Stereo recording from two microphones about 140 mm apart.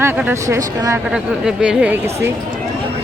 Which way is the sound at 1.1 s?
5° right (ahead or behind).